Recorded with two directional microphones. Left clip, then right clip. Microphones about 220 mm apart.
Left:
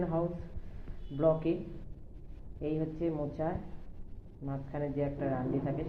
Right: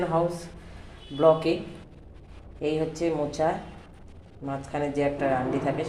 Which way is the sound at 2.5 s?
20° right (ahead or behind).